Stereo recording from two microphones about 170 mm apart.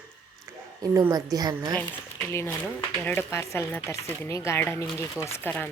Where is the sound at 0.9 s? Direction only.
20° right (ahead or behind).